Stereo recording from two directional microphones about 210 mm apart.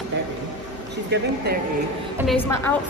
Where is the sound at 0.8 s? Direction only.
50° right (ahead or behind).